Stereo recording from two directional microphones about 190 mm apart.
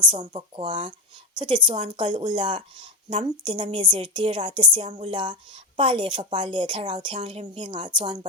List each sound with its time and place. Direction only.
0.2 s a woman's voice: 30° right (ahead or behind)